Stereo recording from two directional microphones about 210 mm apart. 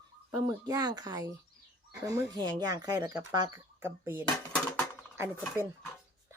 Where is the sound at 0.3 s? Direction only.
15° right (ahead or behind).